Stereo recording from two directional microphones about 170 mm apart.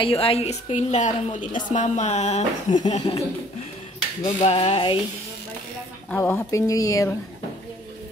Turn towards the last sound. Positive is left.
turn(degrees=20)  # may be behind; listen again after turning